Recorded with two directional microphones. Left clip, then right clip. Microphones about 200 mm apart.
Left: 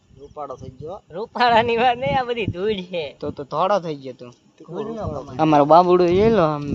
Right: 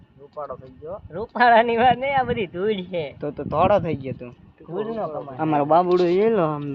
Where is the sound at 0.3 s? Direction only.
40° left (ahead or behind).